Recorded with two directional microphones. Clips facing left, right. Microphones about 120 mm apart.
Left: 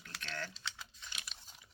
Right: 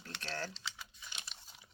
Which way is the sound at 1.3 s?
30° right (ahead or behind).